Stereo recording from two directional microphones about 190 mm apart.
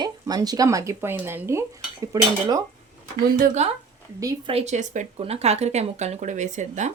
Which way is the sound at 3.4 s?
35° right (ahead or behind).